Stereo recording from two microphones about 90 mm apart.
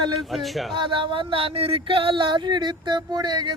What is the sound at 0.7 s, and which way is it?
Speech, 65° right (ahead or behind).